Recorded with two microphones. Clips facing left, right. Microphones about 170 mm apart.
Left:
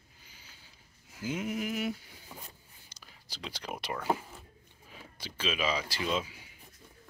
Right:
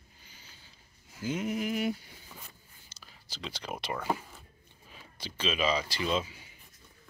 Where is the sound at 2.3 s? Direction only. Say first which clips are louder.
Left 3 dB; 15° left (ahead or behind).